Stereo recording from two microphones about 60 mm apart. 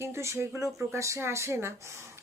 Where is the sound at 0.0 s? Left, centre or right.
Right.